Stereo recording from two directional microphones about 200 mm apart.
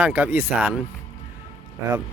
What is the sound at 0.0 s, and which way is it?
Speech, 10° right (ahead or behind).